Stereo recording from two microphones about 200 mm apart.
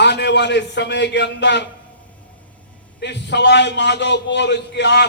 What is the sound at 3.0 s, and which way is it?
A man's voice, 60° left (ahead or behind).